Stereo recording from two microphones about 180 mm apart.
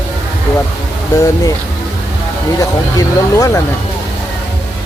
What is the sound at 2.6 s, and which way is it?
Speech, 20° left (ahead or behind).